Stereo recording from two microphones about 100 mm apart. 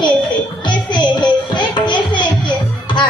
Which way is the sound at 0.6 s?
50° left (ahead or behind).